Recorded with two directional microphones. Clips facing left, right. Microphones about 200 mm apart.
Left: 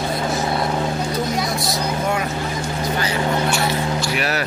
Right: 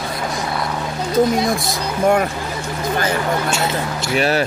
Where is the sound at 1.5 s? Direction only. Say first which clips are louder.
Right 2 dB; 50° right (ahead or behind).